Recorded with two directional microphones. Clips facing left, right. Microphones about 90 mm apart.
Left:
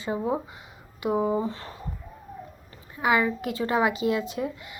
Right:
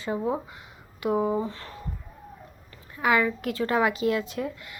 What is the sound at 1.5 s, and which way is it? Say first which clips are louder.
Speech: left 2 dB; 25° left (ahead or behind).